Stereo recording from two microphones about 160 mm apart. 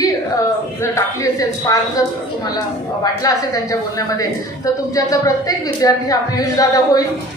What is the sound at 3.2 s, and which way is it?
A woman's voice, 20° left (ahead or behind).